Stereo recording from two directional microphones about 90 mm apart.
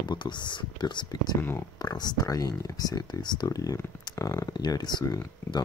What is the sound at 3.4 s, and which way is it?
Speech, 40° left (ahead or behind).